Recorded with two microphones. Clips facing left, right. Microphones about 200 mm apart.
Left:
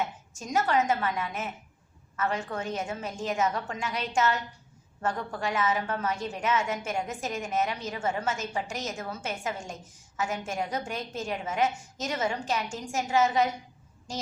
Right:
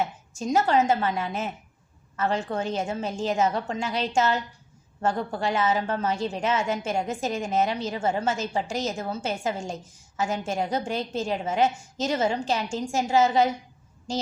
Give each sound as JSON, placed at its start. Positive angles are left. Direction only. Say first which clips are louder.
{"t": 0.3, "sound": "a woman's voice", "louder": "right 4 dB", "side_deg": -30}